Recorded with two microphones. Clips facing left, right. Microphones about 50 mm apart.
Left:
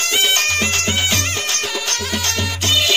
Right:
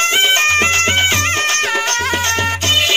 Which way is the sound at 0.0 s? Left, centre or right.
Right.